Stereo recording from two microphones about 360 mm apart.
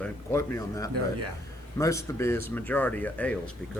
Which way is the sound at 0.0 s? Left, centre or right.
Centre.